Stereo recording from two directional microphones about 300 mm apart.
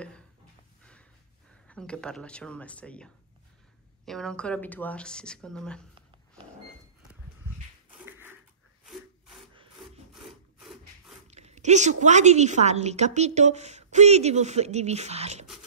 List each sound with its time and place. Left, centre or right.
1.7 s speech: centre
10.6 s a sound: centre
11.2 s a woman's voice: right